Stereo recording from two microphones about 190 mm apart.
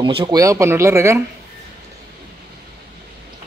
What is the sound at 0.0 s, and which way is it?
Speech, 25° right (ahead or behind).